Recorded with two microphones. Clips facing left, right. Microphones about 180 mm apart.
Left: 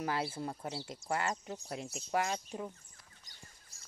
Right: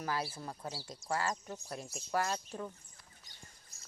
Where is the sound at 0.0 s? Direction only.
25° left (ahead or behind).